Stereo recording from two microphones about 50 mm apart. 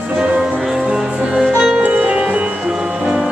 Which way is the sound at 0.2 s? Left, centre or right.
Centre.